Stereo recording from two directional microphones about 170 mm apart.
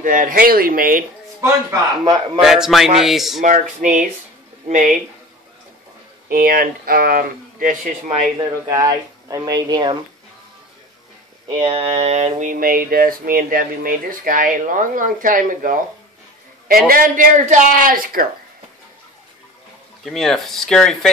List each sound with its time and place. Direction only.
0.0 s speech: 55° right (ahead or behind)
1.4 s speech: 25° right (ahead or behind)
2.4 s speech: centre (ahead or behind)
3.4 s a sound: 50° right (ahead or behind)
6.2 s speech: 60° right (ahead or behind)
8.4 s speech: 20° right (ahead or behind)
11.4 s a sound: 35° right (ahead or behind); by 15.8 s 50° right (ahead or behind)
16.6 s speech: 60° right (ahead or behind)
20.1 s speech: 5° left (ahead or behind)